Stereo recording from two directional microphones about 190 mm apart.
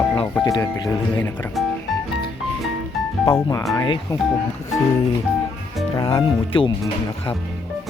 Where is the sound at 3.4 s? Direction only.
15° left (ahead or behind).